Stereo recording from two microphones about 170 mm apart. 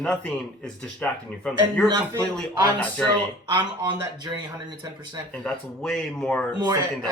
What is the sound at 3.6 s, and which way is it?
Speech, 30° right (ahead or behind).